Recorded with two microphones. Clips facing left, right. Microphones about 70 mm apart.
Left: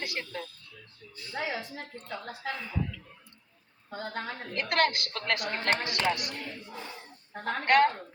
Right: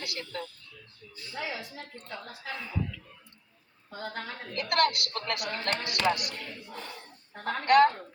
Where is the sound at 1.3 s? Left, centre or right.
Left.